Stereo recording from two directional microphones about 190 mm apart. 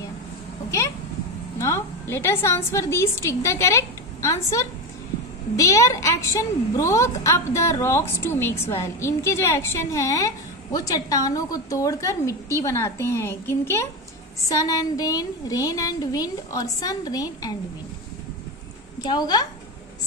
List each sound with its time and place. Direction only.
1.6 s a woman's voice: 15° left (ahead or behind)
18.9 s a woman's voice: 20° left (ahead or behind)